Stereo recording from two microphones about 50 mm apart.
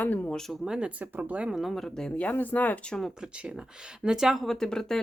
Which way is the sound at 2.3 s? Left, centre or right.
Left.